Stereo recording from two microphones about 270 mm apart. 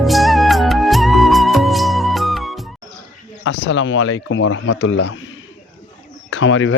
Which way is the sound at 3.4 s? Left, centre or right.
Left.